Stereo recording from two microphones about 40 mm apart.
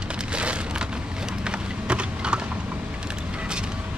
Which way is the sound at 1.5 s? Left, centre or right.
Right.